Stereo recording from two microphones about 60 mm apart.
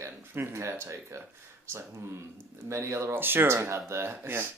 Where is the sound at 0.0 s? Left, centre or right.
Right.